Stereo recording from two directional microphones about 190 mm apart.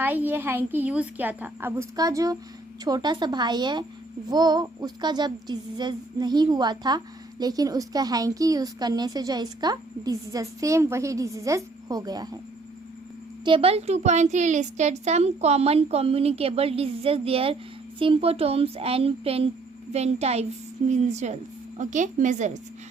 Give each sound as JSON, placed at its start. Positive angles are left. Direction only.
{"t": 0.0, "sound": "a woman's voice", "side_deg": -10}
{"t": 13.4, "sound": "speech", "side_deg": -30}